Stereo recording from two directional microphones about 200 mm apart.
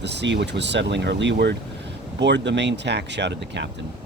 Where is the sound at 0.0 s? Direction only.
60° right (ahead or behind).